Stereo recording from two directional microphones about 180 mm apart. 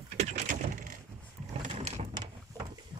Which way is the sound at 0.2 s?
40° right (ahead or behind).